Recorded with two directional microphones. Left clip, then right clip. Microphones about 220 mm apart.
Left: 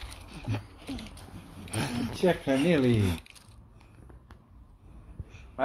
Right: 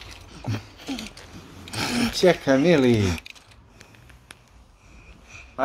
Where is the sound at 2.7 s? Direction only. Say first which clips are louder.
Right 7 dB; 30° right (ahead or behind).